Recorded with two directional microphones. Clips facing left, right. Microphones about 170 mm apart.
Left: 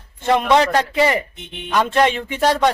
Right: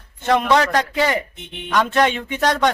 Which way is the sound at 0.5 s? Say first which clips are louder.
Left 3 dB; 30° left (ahead or behind).